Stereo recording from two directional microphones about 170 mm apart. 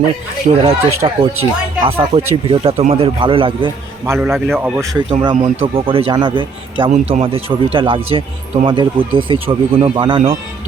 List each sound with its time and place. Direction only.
0.6 s speech: 30° right (ahead or behind)
4.0 s a man's voice: 15° right (ahead or behind)
4.3 s speech: centre (ahead or behind)
5.0 s speech: 30° right (ahead or behind)